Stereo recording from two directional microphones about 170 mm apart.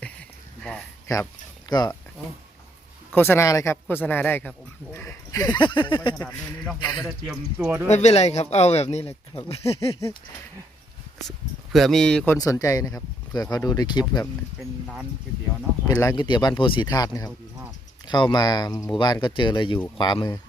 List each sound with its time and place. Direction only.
1.0 s speech: 20° left (ahead or behind)
3.2 s speech: 15° left (ahead or behind)
7.0 s speech: 5° right (ahead or behind)
7.9 s speech: 40° left (ahead or behind)
11.3 s speech: centre (ahead or behind)
12.4 s speech: 20° left (ahead or behind)
15.9 s speech: 20° left (ahead or behind)